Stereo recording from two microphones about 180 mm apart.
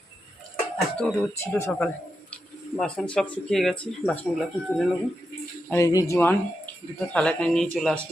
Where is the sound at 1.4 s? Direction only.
15° left (ahead or behind).